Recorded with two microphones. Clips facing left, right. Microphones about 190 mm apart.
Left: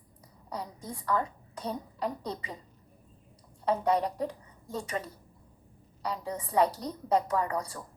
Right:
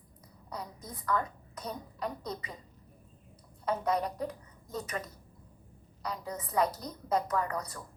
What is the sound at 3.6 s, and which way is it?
A woman's voice, 30° left (ahead or behind).